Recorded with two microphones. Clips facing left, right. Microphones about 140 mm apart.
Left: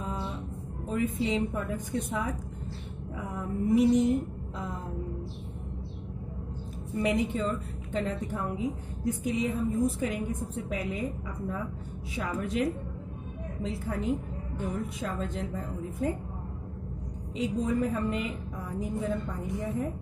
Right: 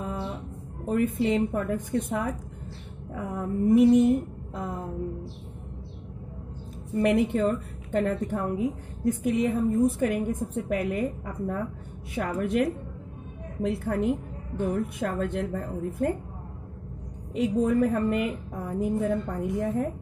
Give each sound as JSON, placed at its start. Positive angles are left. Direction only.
{"t": 0.8, "sound": "a woman's voice", "side_deg": -55}
{"t": 7.0, "sound": "a woman's voice", "side_deg": -60}
{"t": 17.3, "sound": "a woman's voice", "side_deg": -60}